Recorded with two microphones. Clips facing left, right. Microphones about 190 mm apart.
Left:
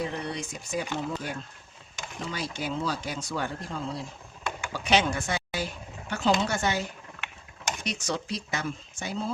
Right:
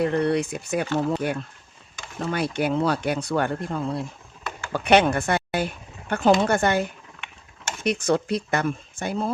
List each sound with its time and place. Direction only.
0.0 s speech: 60° right (ahead or behind)